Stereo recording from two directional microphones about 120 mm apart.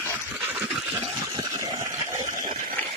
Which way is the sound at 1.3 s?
30° right (ahead or behind).